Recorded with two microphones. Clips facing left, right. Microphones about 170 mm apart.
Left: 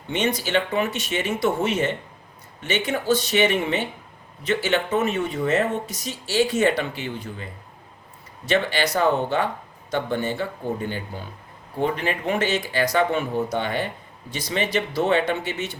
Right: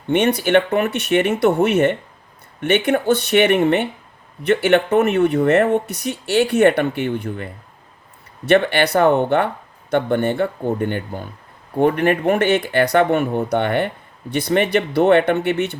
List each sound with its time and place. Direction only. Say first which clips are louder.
0.1 s speech: right 8 dB; 60° right (ahead or behind)